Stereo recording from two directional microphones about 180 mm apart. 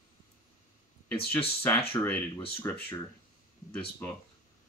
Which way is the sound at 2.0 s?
20° left (ahead or behind).